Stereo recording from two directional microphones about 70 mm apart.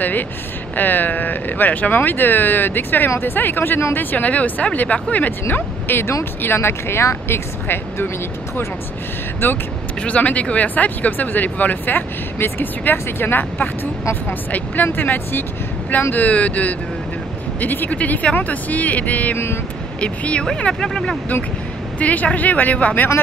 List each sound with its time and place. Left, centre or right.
0.7 s speech: left
5.5 s speech: left
9.4 s speech: left
10.0 s speech: centre
19.3 s speech: left
20.0 s speech: centre